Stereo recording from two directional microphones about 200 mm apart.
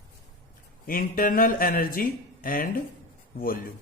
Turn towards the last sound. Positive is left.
turn(degrees=45)  # may be behind; listen again after turning